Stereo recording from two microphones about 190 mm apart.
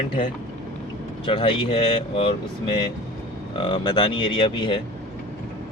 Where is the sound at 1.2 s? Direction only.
30° left (ahead or behind).